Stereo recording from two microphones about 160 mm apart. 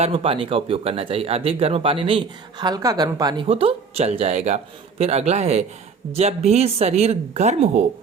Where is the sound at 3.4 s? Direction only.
35° right (ahead or behind).